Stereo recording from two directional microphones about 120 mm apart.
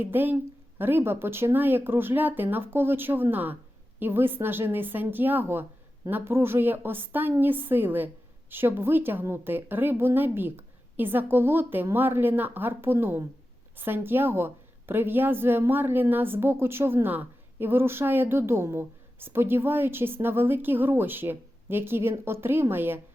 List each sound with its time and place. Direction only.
0.0 s a woman's voice: 15° right (ahead or behind)